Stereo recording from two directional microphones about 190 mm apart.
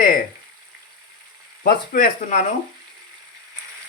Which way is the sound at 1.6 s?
50° left (ahead or behind).